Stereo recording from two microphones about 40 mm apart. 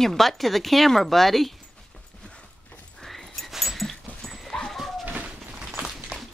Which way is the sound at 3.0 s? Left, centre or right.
Centre.